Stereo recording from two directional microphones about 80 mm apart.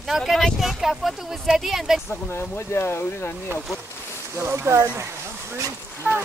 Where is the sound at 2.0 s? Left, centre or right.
Left.